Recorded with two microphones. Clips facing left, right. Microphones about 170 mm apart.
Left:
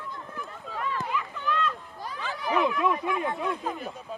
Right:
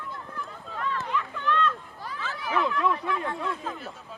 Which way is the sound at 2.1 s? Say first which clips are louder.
Left 2 dB; 15° left (ahead or behind).